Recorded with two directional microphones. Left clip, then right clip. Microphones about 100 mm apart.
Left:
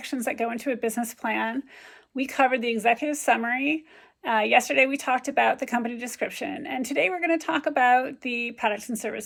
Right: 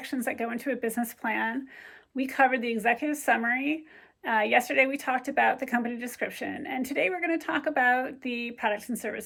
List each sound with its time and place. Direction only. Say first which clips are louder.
0.1 s speech: left 4 dB; 20° left (ahead or behind)
6.4 s speech: left 2 dB; 35° left (ahead or behind)
6.8 s speech: left 4 dB; 25° left (ahead or behind)